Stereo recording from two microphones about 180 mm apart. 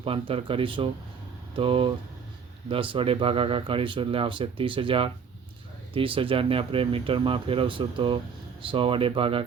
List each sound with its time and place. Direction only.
0.0 s speech: 30° right (ahead or behind)